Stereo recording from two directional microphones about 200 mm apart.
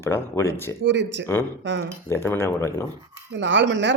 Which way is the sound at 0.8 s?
65° right (ahead or behind).